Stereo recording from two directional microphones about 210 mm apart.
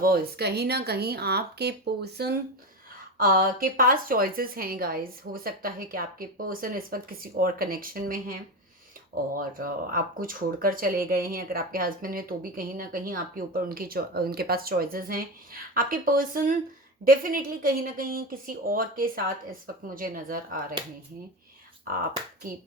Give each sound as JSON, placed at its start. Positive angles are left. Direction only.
{"t": 0.0, "sound": "speech", "side_deg": -50}